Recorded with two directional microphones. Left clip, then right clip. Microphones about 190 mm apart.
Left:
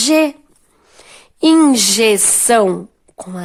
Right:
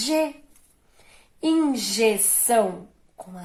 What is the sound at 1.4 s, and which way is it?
Speech, 55° left (ahead or behind).